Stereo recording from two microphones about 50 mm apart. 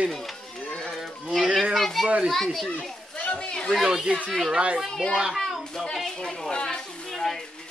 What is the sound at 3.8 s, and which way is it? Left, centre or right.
Speech, centre.